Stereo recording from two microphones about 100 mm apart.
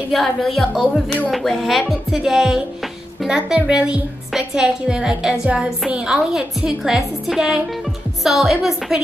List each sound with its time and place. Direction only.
0.1 s a woman's voice: centre (ahead or behind)